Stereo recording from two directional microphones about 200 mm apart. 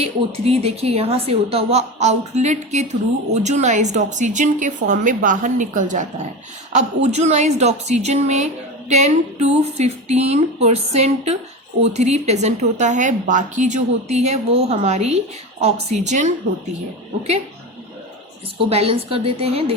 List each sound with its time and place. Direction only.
0.0 s a woman's voice: 30° right (ahead or behind)
18.7 s a woman's voice: 30° right (ahead or behind)